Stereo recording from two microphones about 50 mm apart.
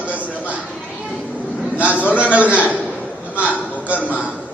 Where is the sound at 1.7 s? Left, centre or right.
Right.